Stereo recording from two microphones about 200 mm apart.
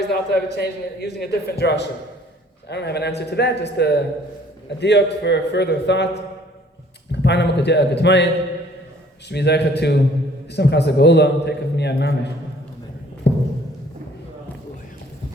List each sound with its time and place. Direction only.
0.1 s a man's voice: 55° left (ahead or behind)
7.1 s a man's voice: 60° left (ahead or behind)
9.3 s a man's voice: 55° left (ahead or behind)
13.2 s a sound: 55° left (ahead or behind)